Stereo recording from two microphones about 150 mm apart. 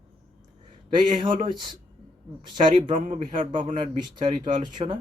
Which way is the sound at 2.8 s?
60° right (ahead or behind).